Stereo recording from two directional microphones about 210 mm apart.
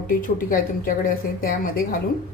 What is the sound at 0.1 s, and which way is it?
A woman's voice, 40° left (ahead or behind).